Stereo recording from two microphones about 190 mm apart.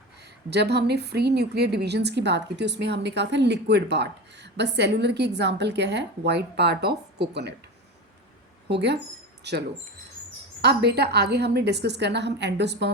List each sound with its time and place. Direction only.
0.5 s a woman's voice: 60° right (ahead or behind)
8.7 s a woman's voice: 60° right (ahead or behind)
10.8 s a woman's voice: 60° right (ahead or behind)